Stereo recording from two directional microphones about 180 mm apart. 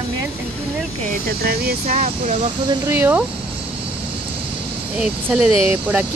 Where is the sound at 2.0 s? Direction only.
40° right (ahead or behind).